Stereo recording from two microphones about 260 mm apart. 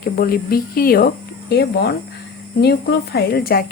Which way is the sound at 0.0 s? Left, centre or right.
Left.